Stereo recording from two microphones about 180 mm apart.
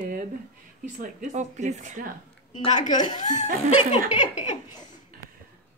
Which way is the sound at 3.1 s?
45° left (ahead or behind).